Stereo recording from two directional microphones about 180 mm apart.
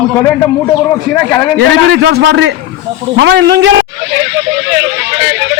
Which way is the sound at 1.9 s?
65° right (ahead or behind).